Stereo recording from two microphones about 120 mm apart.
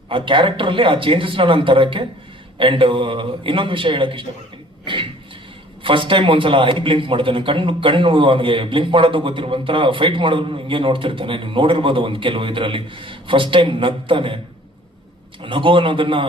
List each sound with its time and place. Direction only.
0.1 s a man's voice: 45° right (ahead or behind)
5.8 s a man's voice: 45° right (ahead or behind)
15.4 s a man's voice: 45° right (ahead or behind)